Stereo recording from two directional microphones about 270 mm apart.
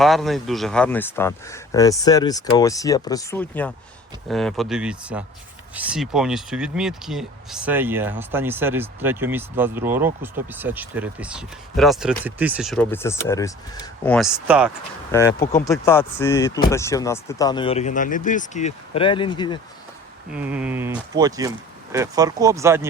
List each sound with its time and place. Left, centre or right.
0.0 s speech: centre
15.1 s speech: centre
20.3 s speech: centre